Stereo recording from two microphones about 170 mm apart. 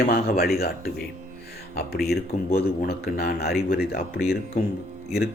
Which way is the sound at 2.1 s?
65° left (ahead or behind).